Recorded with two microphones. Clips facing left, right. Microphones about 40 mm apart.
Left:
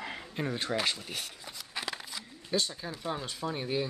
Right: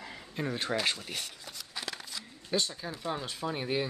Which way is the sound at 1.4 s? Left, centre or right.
Centre.